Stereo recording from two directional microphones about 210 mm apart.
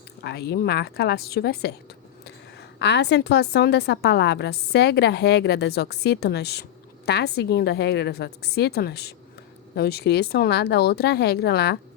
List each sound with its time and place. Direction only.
0.2 s a woman's voice: 50° left (ahead or behind)